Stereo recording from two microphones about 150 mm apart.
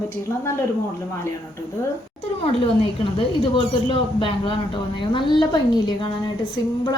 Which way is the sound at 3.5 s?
35° left (ahead or behind).